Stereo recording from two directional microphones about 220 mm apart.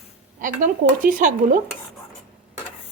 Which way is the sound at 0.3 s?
35° right (ahead or behind).